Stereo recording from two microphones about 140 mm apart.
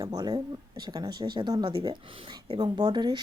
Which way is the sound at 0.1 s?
30° right (ahead or behind).